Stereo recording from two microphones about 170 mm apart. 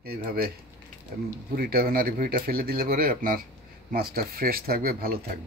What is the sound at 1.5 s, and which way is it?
Speech, 60° right (ahead or behind).